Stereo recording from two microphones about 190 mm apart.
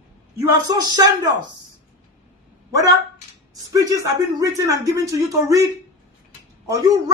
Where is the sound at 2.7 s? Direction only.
15° right (ahead or behind).